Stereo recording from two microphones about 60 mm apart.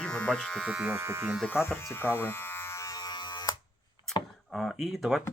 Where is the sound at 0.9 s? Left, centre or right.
Right.